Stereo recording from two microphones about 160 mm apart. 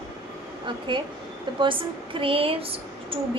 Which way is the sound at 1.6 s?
30° right (ahead or behind).